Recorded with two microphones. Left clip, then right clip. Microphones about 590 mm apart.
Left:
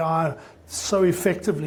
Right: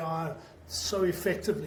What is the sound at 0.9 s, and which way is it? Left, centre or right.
Speech, left.